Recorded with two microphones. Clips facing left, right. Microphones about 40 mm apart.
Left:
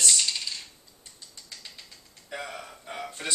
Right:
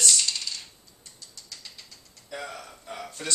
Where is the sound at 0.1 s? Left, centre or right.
Centre.